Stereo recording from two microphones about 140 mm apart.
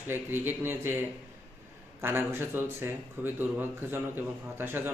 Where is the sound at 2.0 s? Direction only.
15° right (ahead or behind).